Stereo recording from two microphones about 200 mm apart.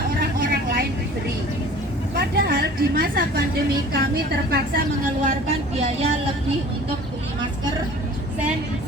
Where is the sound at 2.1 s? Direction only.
50° right (ahead or behind).